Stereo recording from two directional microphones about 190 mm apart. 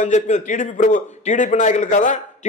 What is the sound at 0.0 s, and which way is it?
A man's voice, 40° left (ahead or behind).